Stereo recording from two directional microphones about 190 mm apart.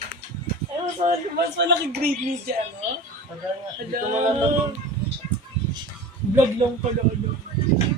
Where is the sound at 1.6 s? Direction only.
65° right (ahead or behind).